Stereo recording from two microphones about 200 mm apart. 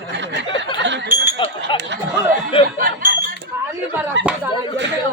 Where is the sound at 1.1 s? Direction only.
10° right (ahead or behind).